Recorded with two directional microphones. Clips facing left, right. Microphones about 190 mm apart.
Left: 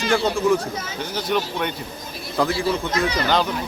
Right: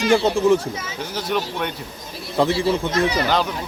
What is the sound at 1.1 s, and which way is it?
Speech, centre (ahead or behind).